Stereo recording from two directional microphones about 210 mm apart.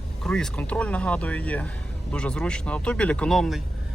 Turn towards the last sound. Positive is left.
turn(degrees=0)  # may be behind; listen again after turning